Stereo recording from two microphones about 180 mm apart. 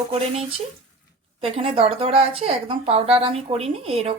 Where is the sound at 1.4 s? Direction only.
30° right (ahead or behind).